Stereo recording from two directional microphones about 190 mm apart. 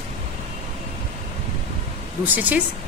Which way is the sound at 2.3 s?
10° right (ahead or behind).